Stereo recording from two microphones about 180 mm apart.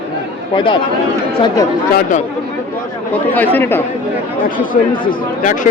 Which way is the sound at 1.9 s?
45° left (ahead or behind).